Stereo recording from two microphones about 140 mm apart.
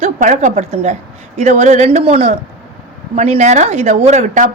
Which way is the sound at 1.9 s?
45° right (ahead or behind).